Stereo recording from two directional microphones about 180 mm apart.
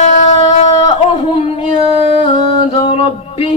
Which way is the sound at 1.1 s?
35° left (ahead or behind).